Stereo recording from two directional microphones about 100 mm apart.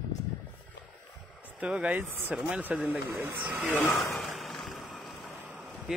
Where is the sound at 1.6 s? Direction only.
10° right (ahead or behind).